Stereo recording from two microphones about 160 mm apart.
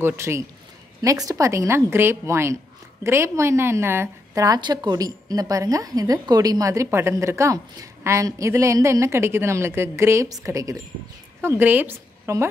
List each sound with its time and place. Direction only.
0.0 s a woman's voice: 15° right (ahead or behind)